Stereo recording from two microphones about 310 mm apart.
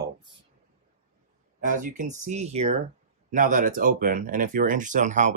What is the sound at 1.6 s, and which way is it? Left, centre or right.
Speech, right.